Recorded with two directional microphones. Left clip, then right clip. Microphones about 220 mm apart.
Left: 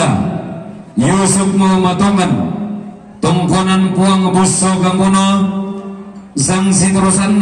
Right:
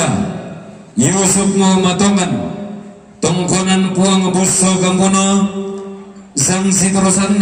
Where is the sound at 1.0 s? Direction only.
50° right (ahead or behind).